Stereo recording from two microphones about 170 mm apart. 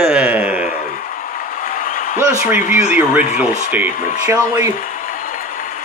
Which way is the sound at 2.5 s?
55° left (ahead or behind).